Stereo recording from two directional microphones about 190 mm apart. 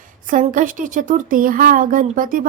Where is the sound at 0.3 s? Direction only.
45° right (ahead or behind).